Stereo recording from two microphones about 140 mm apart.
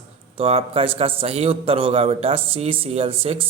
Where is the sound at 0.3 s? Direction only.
45° right (ahead or behind).